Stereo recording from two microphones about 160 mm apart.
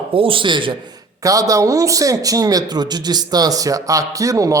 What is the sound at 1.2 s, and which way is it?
A man's voice, 20° right (ahead or behind).